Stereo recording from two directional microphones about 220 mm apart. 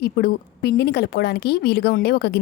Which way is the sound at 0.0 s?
45° left (ahead or behind).